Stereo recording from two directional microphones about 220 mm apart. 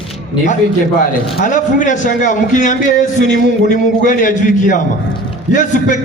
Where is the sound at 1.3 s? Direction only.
35° left (ahead or behind).